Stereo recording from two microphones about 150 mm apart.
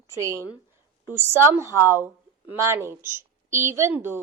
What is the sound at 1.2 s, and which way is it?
A woman's voice, 15° right (ahead or behind).